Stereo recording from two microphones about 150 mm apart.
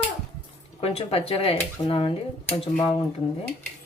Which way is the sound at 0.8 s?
40° left (ahead or behind).